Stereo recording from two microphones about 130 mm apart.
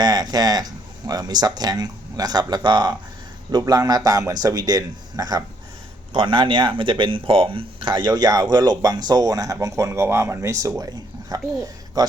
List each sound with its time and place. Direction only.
0.0 s a man's voice: 30° right (ahead or behind)
6.1 s speech: 40° right (ahead or behind)